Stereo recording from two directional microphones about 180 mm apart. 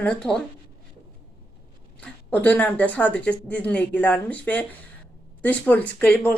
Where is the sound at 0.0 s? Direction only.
5° left (ahead or behind).